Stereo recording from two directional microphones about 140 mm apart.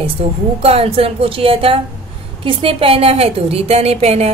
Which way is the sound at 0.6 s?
45° right (ahead or behind).